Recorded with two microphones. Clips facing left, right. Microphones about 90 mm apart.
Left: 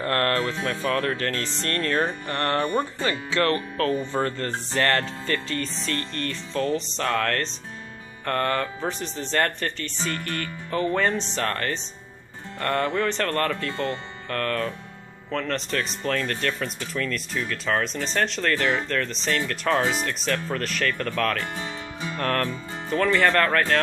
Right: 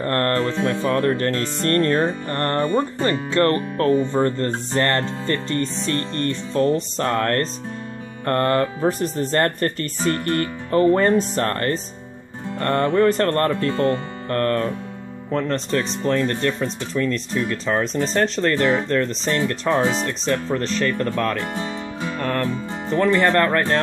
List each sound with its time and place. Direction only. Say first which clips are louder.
0.0 s speech: right 3 dB; 30° right (ahead or behind)
1.1 s music: right 6 dB; 35° right (ahead or behind)
9.0 s speech: right 5 dB; 50° right (ahead or behind)
12.5 s music: right 6 dB; 35° right (ahead or behind)
15.3 s speech: right 5 dB; 30° right (ahead or behind)
18.0 s music: right 5 dB; 35° right (ahead or behind)
18.4 s speech: right 5 dB; 25° right (ahead or behind)
19.0 s speech: right 5 dB; 30° right (ahead or behind)
22.2 s music: right 1 dB; 10° right (ahead or behind)
22.8 s speech: right 3 dB; 20° right (ahead or behind)